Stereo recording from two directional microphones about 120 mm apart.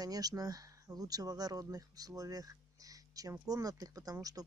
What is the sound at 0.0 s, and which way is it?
Speech, 30° right (ahead or behind).